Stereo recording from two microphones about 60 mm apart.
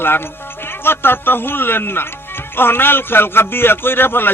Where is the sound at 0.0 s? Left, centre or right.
Left.